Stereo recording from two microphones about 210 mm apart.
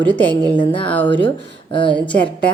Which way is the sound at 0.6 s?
25° left (ahead or behind).